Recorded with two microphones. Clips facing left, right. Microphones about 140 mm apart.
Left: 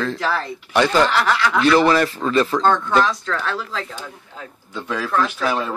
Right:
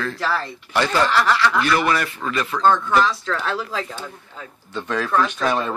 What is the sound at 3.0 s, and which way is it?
Speech, 10° right (ahead or behind).